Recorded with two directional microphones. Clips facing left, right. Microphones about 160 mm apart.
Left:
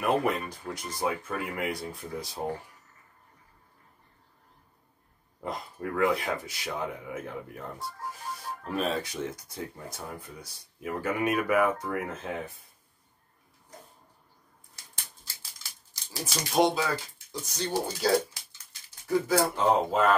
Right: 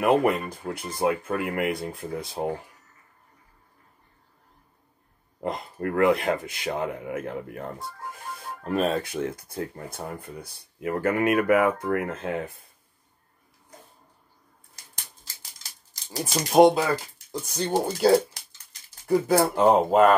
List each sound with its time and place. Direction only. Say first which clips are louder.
0.0 s speech: right 6 dB; 60° right (ahead or behind)
5.4 s speech: right 6 dB; 65° right (ahead or behind)
15.9 s speech: right 7 dB; 45° right (ahead or behind)